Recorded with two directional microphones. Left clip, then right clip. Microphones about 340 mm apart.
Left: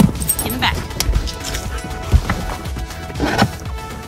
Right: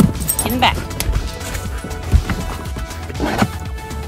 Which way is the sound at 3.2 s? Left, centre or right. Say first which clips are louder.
Left 2 dB; left.